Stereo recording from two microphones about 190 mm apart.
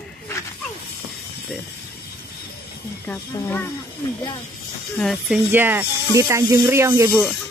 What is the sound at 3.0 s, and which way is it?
Speech, 10° left (ahead or behind).